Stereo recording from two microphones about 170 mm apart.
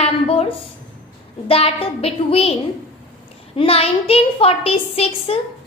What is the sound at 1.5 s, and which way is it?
A child's voice, 35° left (ahead or behind).